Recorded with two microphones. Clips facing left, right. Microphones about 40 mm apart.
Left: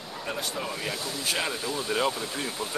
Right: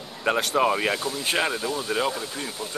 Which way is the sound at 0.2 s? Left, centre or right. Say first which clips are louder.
Right 11 dB; right.